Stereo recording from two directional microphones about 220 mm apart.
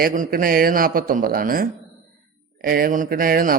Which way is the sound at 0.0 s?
40° right (ahead or behind).